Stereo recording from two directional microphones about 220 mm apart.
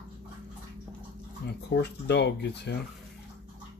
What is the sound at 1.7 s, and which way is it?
Speech, 50° left (ahead or behind).